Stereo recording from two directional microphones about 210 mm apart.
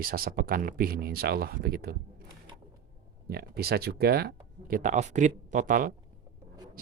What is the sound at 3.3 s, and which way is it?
Speech, 45° right (ahead or behind).